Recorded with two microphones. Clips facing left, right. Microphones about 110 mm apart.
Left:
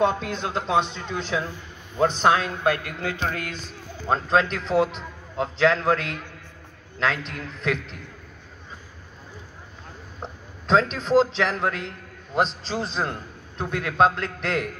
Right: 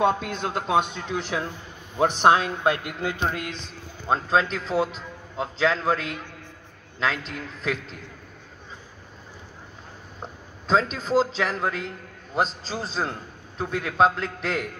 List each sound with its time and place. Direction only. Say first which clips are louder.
0.0 s a man's voice: even; 5° right (ahead or behind); by 3.3 s 20° right (ahead or behind)
4.1 s a man's voice: left 1 dB; 5° right (ahead or behind)
10.2 s a man's voice: left 2 dB; 5° right (ahead or behind)